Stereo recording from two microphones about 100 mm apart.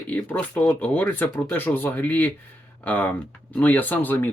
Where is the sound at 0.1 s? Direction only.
15° left (ahead or behind).